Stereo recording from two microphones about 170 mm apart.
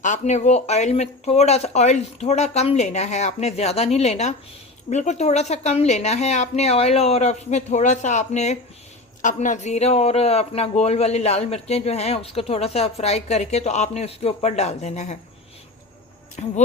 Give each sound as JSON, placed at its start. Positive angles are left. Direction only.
{"t": 0.0, "sound": "a man's voice", "side_deg": 45}
{"t": 16.4, "sound": "speech", "side_deg": 45}